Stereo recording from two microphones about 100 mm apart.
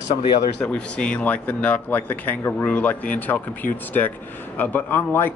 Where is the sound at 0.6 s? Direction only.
10° left (ahead or behind).